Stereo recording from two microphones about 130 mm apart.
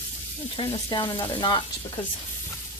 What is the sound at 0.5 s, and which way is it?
Sizzle, 35° left (ahead or behind).